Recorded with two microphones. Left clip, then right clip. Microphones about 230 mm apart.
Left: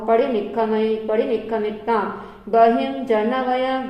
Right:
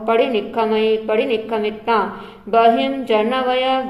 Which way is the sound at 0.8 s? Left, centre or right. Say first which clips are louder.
Right 3 dB; right.